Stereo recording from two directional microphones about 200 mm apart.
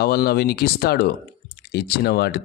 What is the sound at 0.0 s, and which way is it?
Speech, 50° left (ahead or behind).